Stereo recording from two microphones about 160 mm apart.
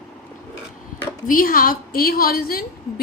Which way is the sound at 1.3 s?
60° left (ahead or behind).